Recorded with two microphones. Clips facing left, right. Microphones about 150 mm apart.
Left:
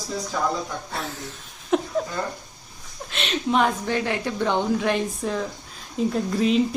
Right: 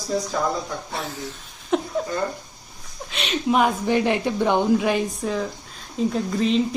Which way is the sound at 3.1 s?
Centre (ahead or behind).